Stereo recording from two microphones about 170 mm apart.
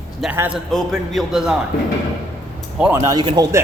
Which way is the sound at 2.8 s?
15° right (ahead or behind).